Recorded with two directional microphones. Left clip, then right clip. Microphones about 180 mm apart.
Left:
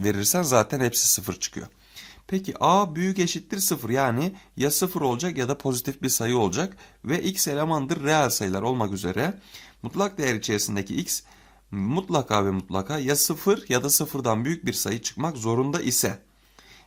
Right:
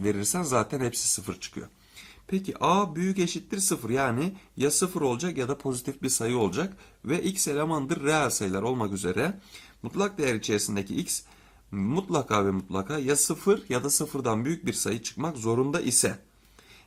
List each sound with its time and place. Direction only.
0.0 s speech: 40° left (ahead or behind)